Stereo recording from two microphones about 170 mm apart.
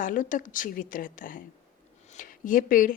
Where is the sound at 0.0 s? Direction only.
50° left (ahead or behind).